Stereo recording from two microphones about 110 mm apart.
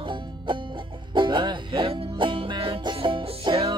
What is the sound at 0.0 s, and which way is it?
Music, 50° right (ahead or behind).